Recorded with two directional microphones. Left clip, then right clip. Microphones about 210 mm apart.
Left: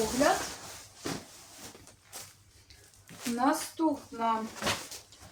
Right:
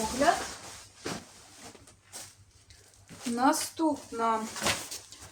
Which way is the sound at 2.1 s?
20° left (ahead or behind).